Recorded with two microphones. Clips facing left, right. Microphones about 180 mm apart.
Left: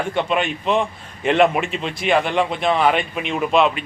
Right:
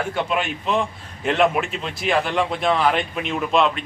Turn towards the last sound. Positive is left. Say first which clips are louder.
# left 2 dB
turn(degrees=5)  # may be behind; listen again after turning